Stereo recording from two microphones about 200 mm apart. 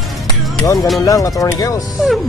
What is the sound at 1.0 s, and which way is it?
Speech, 15° left (ahead or behind).